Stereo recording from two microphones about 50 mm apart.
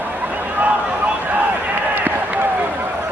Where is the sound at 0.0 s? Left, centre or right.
Right.